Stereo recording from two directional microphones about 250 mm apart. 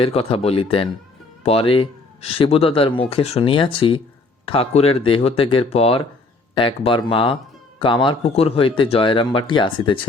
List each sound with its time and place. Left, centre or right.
0.0 s speech: left